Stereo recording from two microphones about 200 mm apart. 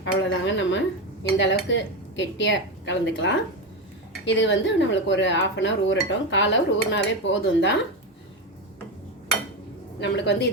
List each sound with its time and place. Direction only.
0.0 s speech: 65° left (ahead or behind)
10.0 s speech: 60° left (ahead or behind)